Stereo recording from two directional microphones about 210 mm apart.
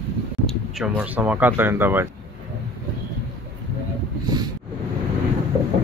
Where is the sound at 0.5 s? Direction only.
5° right (ahead or behind).